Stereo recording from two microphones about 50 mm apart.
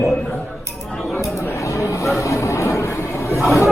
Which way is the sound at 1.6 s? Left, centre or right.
Left.